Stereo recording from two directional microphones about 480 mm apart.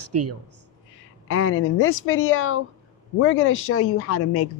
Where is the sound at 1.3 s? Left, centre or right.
Left.